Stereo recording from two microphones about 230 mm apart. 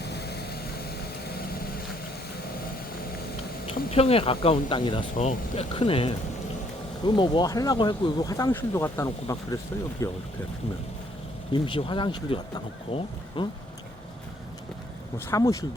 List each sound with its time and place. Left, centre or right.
0.0 s vehicle: left
3.7 s speech: left
11.5 s speech: left
15.3 s speech: centre